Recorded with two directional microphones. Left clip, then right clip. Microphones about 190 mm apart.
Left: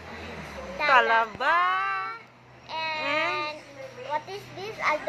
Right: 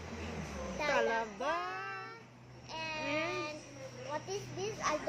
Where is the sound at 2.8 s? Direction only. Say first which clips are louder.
Left 10 dB; 20° right (ahead or behind).